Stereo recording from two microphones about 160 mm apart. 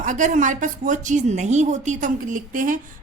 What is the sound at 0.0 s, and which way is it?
A woman's voice, 55° right (ahead or behind).